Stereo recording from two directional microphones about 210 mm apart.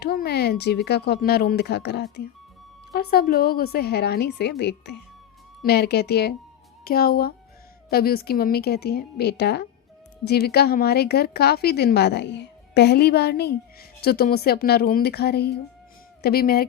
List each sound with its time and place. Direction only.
0.0 s a woman's voice: 50° left (ahead or behind)